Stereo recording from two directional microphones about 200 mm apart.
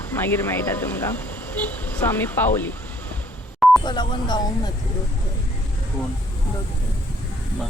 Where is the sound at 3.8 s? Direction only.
20° left (ahead or behind).